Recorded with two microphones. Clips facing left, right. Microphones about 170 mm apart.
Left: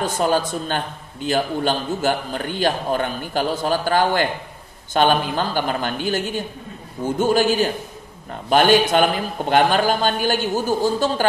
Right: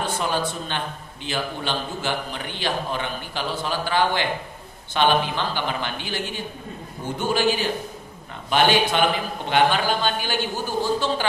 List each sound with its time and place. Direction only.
0.0 s a man's voice: 45° left (ahead or behind)